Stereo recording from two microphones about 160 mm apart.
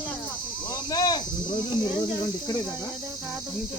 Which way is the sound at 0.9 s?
25° left (ahead or behind).